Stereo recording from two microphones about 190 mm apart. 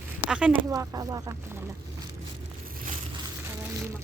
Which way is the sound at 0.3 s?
5° right (ahead or behind).